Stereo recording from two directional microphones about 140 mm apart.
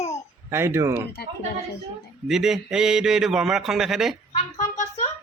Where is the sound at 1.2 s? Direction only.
90° left.